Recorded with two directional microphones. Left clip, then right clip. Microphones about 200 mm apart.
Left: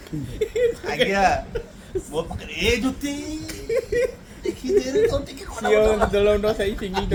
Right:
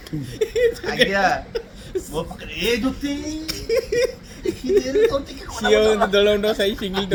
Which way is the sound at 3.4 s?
40° right (ahead or behind).